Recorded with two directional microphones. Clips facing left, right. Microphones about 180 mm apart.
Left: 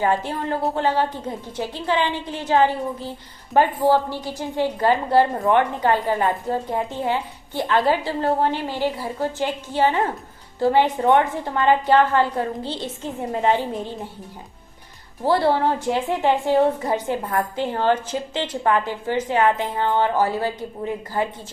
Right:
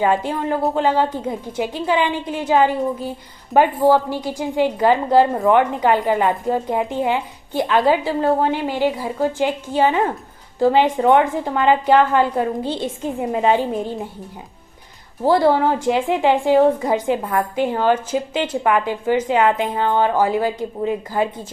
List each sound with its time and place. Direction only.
0.0 s a woman's voice: 15° right (ahead or behind)
15.2 s a woman's voice: 15° right (ahead or behind)